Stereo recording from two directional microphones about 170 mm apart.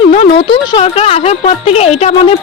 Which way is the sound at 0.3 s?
30° left (ahead or behind).